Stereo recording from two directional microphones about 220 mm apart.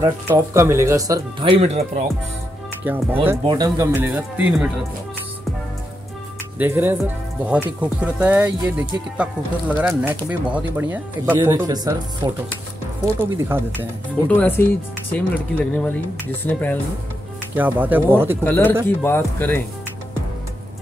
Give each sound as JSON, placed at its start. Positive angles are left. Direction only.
{"t": 0.0, "sound": "speech", "side_deg": -10}
{"t": 2.8, "sound": "speech", "side_deg": -10}
{"t": 6.6, "sound": "speech", "side_deg": -10}
{"t": 14.2, "sound": "speech", "side_deg": 10}
{"t": 17.6, "sound": "speech", "side_deg": -10}
{"t": 18.4, "sound": "speech", "side_deg": 10}